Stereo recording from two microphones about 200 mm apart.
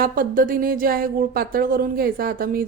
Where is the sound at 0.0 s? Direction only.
45° right (ahead or behind).